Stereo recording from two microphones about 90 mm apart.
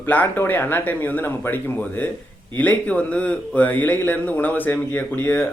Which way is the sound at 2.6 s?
15° left (ahead or behind).